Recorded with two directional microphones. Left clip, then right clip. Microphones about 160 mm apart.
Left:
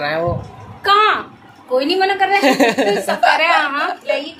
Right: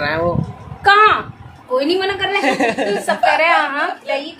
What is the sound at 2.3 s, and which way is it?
Speech, 55° left (ahead or behind).